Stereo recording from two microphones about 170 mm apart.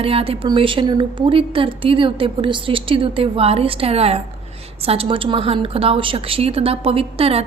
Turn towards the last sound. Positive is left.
turn(degrees=-35)  # may be behind; listen again after turning